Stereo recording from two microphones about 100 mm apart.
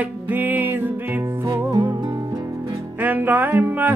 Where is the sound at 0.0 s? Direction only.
15° right (ahead or behind).